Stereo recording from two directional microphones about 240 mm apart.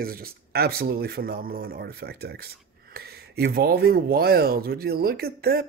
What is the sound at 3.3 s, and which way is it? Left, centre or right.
Speech, right.